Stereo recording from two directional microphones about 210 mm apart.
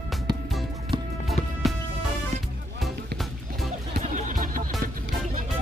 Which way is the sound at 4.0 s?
40° right (ahead or behind).